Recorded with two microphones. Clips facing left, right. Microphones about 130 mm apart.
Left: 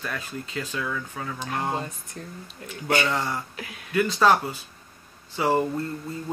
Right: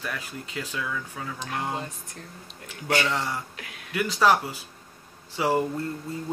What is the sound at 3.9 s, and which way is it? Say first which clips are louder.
Speech: left 2 dB; 10° right (ahead or behind).